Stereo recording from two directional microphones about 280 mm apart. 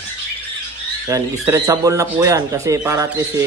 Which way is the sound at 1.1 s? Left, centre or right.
Centre.